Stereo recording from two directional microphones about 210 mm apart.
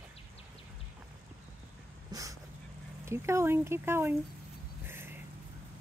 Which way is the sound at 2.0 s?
15° right (ahead or behind).